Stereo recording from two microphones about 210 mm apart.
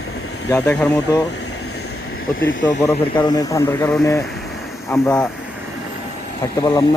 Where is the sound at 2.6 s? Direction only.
15° left (ahead or behind).